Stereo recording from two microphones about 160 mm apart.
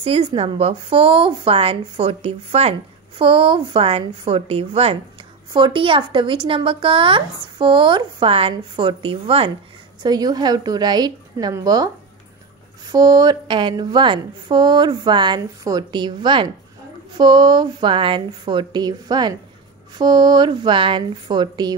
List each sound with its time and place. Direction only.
0.0 s a woman's voice: 35° right (ahead or behind)
12.9 s a woman's voice: 25° right (ahead or behind)